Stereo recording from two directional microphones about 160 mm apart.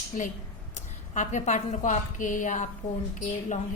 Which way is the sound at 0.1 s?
55° left (ahead or behind).